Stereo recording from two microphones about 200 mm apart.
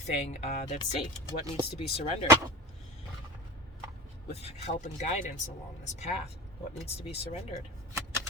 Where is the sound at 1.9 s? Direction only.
30° left (ahead or behind).